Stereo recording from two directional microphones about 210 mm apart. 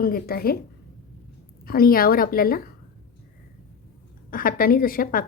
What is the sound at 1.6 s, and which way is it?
A woman's voice, 45° left (ahead or behind).